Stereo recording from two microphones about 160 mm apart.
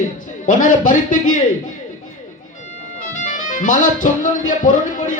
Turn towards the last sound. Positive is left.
turn(degrees=55)  # may be behind; listen again after turning